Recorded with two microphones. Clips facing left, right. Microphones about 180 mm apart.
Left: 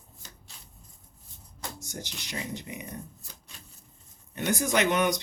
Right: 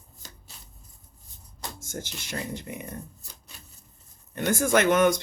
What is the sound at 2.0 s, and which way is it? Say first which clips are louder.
Speech: right 2 dB; 15° left (ahead or behind).